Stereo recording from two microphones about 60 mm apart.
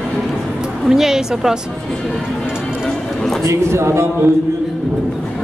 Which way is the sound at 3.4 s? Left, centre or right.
Right.